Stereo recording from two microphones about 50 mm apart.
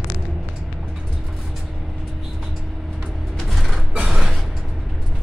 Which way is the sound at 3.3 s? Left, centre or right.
Centre.